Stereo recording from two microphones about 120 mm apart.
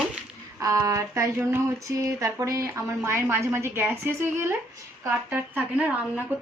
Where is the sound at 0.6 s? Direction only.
25° right (ahead or behind).